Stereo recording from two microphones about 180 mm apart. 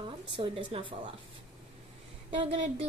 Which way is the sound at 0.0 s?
25° right (ahead or behind).